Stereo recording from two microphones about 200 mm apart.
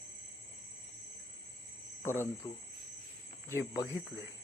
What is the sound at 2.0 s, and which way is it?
Speech, 10° left (ahead or behind).